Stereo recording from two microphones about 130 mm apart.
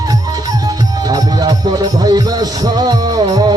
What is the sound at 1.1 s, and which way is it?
Music, 30° right (ahead or behind).